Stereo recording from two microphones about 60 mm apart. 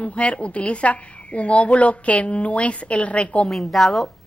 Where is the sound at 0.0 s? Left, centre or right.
Centre.